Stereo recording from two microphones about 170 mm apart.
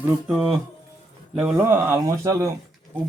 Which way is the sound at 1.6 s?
15° right (ahead or behind).